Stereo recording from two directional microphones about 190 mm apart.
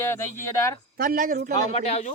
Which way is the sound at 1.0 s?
50° right (ahead or behind).